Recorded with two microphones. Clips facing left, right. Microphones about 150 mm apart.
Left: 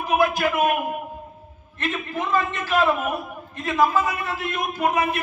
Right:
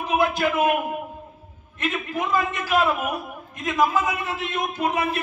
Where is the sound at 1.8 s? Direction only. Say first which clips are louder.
Right 1 dB; 15° right (ahead or behind).